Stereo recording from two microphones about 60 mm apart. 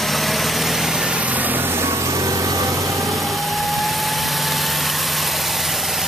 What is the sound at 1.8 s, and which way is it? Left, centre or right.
Vehicle, right.